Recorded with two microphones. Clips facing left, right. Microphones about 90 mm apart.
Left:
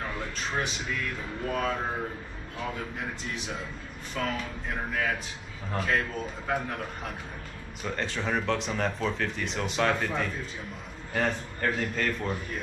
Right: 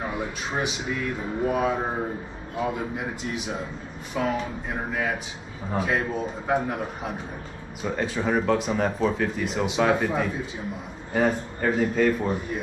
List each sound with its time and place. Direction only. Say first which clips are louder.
0.0 s speech: right 4 dB; 15° right (ahead or behind)